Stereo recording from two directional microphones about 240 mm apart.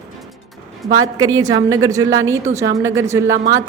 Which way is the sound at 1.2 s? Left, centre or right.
Centre.